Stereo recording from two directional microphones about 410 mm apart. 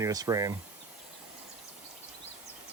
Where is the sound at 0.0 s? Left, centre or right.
Centre.